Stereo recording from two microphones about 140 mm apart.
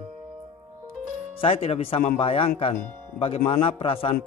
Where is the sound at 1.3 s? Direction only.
45° left (ahead or behind).